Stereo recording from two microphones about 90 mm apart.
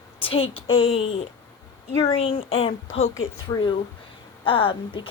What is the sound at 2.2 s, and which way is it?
Speech, 90° left.